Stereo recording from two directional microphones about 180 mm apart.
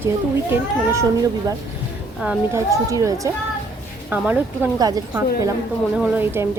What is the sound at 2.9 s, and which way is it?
A woman's voice, 20° right (ahead or behind).